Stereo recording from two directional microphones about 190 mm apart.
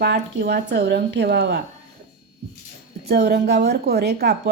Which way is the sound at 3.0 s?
55° right (ahead or behind).